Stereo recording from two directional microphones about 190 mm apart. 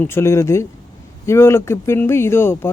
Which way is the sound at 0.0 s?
15° left (ahead or behind).